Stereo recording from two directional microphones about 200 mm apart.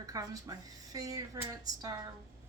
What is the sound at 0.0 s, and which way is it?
Speech, 20° right (ahead or behind).